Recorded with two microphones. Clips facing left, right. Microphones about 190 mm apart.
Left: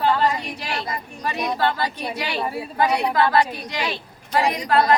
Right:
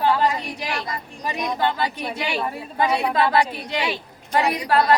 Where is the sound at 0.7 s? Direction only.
25° left (ahead or behind).